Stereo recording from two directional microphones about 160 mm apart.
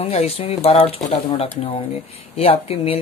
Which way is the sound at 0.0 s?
40° left (ahead or behind).